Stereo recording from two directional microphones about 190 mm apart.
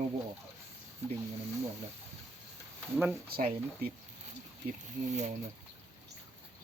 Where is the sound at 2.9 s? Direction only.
5° right (ahead or behind).